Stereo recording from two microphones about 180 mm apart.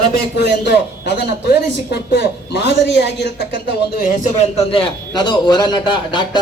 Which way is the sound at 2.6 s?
75° left (ahead or behind).